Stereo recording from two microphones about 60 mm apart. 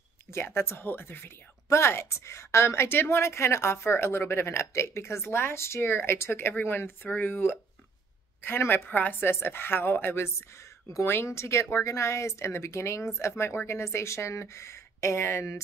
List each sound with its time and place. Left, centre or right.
0.6 s a woman's voice: left
9.2 s a woman's voice: left